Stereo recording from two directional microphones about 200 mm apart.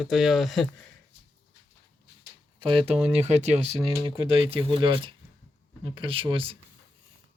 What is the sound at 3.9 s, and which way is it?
Speech, 20° right (ahead or behind).